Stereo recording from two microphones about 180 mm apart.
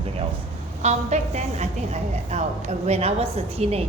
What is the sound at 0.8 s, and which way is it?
A woman's voice, 40° right (ahead or behind).